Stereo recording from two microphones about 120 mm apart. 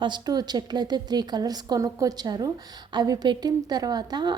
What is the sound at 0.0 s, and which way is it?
A woman's voice, 35° right (ahead or behind).